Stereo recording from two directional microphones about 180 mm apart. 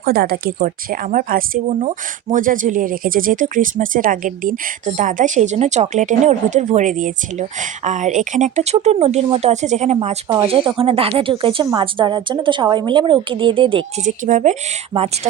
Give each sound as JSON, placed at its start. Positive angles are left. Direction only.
{"t": 0.0, "sound": "speech", "side_deg": -55}
{"t": 14.0, "sound": "speech", "side_deg": -45}